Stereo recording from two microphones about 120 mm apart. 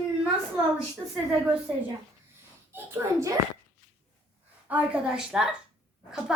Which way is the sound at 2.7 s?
20° right (ahead or behind).